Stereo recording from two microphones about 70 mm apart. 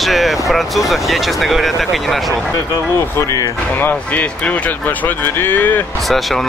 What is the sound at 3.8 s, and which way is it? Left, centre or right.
Speech, left.